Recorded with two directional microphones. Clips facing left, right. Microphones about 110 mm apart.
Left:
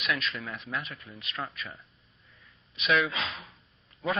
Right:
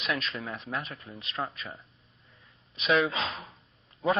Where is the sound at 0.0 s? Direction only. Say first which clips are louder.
Even; 35° right (ahead or behind).